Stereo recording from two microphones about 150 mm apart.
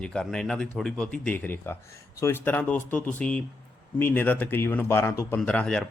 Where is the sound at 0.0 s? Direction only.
5° left (ahead or behind).